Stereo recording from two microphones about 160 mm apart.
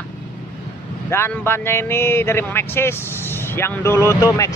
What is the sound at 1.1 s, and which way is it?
Speech, 15° left (ahead or behind).